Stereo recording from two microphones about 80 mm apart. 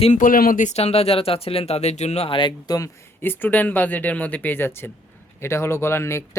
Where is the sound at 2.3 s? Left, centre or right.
Left.